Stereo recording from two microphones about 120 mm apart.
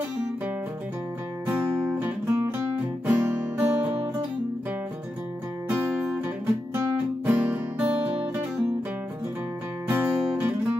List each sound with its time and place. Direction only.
1.8 s music: 20° right (ahead or behind)
5.7 s music: 5° right (ahead or behind)
6.7 s music: 15° right (ahead or behind)
9.8 s music: 15° right (ahead or behind)